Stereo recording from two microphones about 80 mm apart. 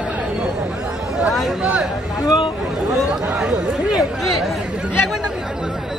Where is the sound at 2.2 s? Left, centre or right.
Left.